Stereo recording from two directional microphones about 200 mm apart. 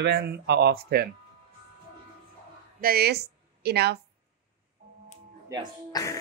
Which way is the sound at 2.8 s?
50° right (ahead or behind).